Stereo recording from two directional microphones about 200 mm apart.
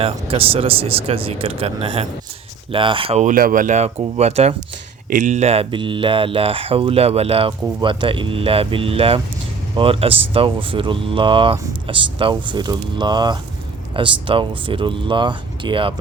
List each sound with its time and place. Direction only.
0.0 s speech: 30° right (ahead or behind)